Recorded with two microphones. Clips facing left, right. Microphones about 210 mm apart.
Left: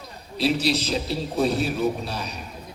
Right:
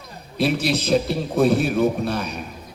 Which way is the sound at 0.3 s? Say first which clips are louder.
Right 1 dB; 55° right (ahead or behind).